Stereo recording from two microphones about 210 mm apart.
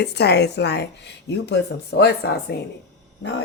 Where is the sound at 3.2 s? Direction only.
55° left (ahead or behind).